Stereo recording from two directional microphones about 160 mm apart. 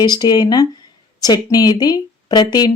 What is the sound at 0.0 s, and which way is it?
Speech, 25° left (ahead or behind).